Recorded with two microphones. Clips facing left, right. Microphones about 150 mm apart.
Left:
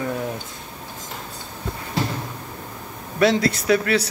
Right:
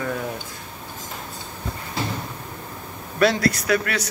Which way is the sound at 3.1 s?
25° left (ahead or behind).